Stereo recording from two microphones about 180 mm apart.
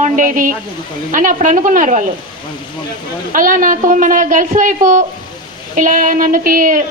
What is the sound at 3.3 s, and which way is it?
A woman's voice, 50° right (ahead or behind).